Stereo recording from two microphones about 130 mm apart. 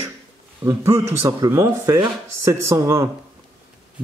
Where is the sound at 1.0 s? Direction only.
25° right (ahead or behind).